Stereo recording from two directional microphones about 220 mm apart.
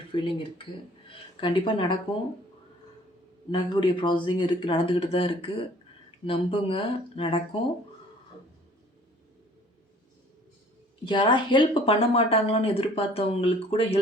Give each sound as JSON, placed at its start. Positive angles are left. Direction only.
{"t": 0.1, "sound": "speech", "side_deg": 25}
{"t": 3.5, "sound": "speech", "side_deg": 20}
{"t": 11.0, "sound": "speech", "side_deg": 20}